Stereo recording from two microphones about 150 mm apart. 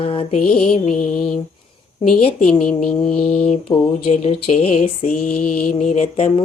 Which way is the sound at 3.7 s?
40° left (ahead or behind).